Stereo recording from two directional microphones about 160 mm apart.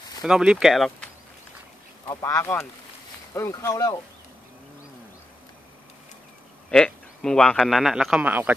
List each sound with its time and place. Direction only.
0.2 s a man's voice: 5° right (ahead or behind)
2.0 s speech: 15° left (ahead or behind)
6.7 s a man's voice: 5° left (ahead or behind)